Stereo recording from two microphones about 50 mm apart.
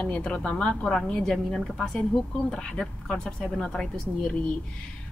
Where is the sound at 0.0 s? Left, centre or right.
Left.